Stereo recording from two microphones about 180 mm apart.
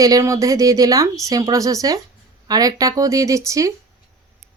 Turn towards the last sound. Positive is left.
turn(degrees=-15)  # may be behind; listen again after turning